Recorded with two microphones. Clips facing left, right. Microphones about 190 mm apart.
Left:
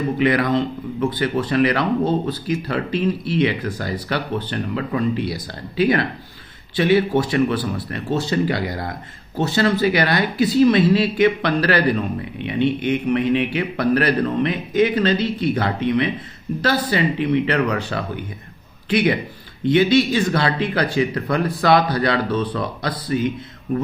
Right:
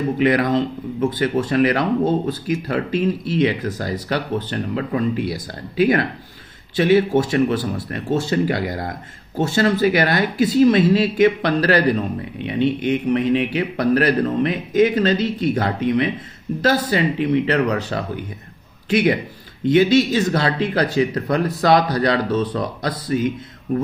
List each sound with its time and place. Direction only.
0.2 s speech: 45° right (ahead or behind)